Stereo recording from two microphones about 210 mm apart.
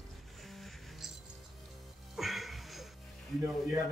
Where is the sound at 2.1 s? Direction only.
Centre (ahead or behind).